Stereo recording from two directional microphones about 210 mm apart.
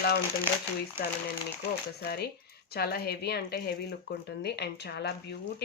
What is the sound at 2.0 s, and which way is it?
Speech, 50° left (ahead or behind).